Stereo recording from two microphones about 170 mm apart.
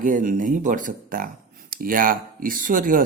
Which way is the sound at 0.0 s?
50° right (ahead or behind).